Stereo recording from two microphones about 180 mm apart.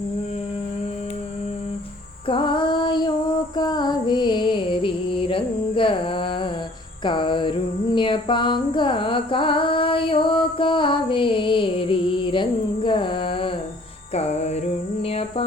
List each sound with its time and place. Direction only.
2.2 s female singing: 30° left (ahead or behind)
3.5 s music: 25° left (ahead or behind)
7.0 s a sound: 25° left (ahead or behind)
14.1 s music: 35° left (ahead or behind)